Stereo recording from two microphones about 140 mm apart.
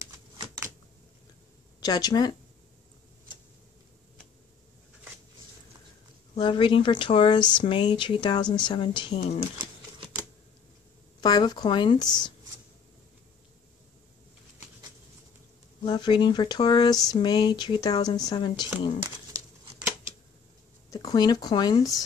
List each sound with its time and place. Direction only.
1.8 s speech: 25° left (ahead or behind)
6.3 s speech: 35° left (ahead or behind)
11.1 s speech: 30° left (ahead or behind)
15.8 s speech: 35° left (ahead or behind)
20.9 s speech: 25° left (ahead or behind)